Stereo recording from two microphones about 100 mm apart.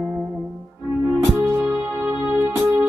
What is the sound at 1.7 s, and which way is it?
Music, 20° right (ahead or behind).